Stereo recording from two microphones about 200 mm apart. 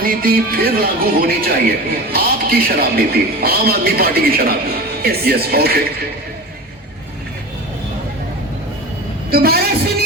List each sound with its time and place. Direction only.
0.0 s a man's voice: 45° right (ahead or behind)
9.3 s a man's voice: 50° right (ahead or behind)